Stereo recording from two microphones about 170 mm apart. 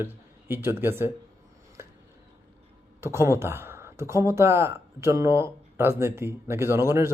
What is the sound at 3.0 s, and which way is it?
Speech, 15° right (ahead or behind).